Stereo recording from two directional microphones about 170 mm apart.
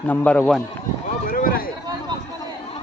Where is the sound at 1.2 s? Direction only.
55° left (ahead or behind).